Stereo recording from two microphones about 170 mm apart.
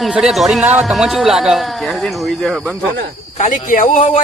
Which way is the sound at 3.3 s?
45° left (ahead or behind).